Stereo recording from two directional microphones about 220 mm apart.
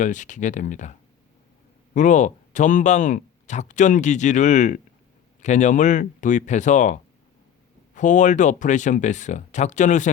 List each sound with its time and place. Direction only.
0.0 s speech: 35° left (ahead or behind)